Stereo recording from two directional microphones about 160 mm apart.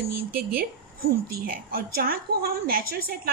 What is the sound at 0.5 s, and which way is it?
A woman's voice, 70° right (ahead or behind).